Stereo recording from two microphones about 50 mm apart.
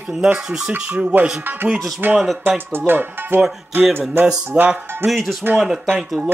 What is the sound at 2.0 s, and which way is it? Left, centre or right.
Speech, right.